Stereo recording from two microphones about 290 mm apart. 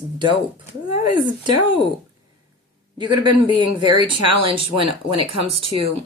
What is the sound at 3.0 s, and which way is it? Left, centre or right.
Speech, centre.